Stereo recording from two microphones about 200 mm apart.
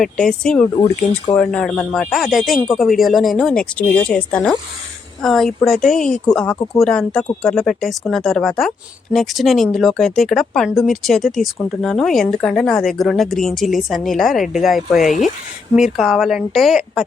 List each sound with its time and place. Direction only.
0.0 s speech: 5° left (ahead or behind)